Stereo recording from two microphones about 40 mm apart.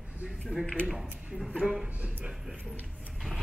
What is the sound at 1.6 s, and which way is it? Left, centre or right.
Speech, centre.